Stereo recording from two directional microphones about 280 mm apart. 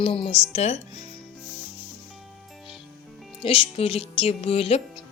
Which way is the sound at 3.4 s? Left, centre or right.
Centre.